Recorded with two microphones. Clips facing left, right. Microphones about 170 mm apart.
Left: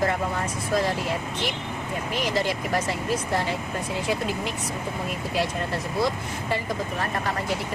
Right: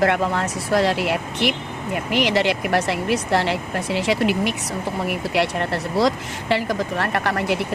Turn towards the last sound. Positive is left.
turn(degrees=-70)  # may be behind; listen again after turning